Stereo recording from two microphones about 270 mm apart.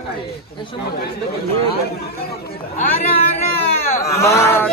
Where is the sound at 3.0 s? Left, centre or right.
Left.